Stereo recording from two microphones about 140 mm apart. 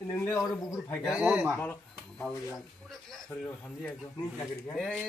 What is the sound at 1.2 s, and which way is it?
Speech, 10° right (ahead or behind).